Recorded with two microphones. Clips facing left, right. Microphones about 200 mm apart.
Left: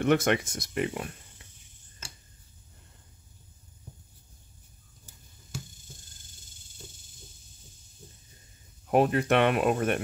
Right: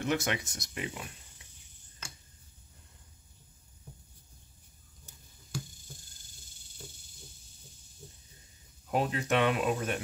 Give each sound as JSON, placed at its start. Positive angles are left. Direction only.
{"t": 0.0, "sound": "speech", "side_deg": 55}
{"t": 8.9, "sound": "speech", "side_deg": 60}